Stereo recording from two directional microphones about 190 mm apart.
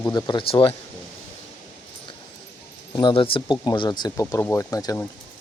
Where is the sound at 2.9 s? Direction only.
25° left (ahead or behind).